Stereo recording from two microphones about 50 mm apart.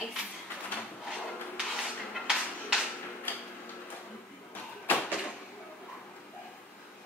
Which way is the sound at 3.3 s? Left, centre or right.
Left.